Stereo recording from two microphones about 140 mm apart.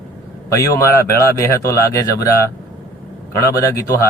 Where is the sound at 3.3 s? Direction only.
20° left (ahead or behind).